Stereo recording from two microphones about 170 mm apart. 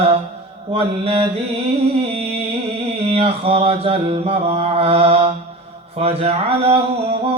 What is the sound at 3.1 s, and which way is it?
Mantra, 35° right (ahead or behind).